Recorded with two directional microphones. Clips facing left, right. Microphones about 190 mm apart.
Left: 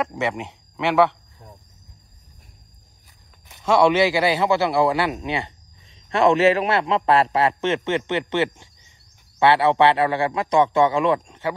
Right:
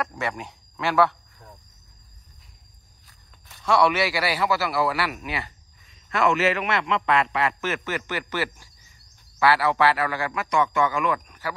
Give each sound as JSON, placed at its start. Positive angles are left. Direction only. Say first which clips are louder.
{"t": 0.0, "sound": "speech", "louder": "left 5 dB", "side_deg": 20}
{"t": 3.4, "sound": "a man's voice", "louder": "left 4 dB", "side_deg": 20}